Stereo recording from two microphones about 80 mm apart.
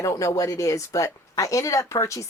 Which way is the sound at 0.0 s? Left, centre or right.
Left.